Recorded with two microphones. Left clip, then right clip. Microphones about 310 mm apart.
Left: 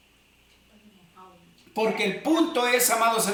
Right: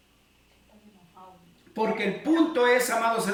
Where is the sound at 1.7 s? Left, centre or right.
Centre.